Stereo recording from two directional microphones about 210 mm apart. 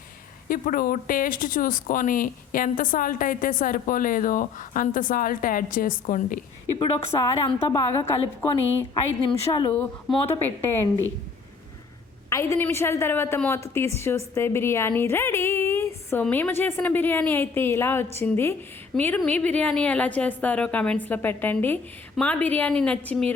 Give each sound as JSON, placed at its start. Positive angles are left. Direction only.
{"t": 0.4, "sound": "speech", "side_deg": 40}
{"t": 6.7, "sound": "a woman's voice", "side_deg": 25}
{"t": 7.7, "sound": "a woman's voice", "side_deg": 15}
{"t": 12.3, "sound": "a woman's voice", "side_deg": 15}